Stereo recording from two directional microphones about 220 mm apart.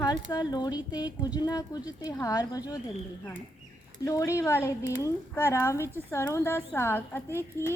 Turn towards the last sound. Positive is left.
turn(degrees=10)  # may be behind; listen again after turning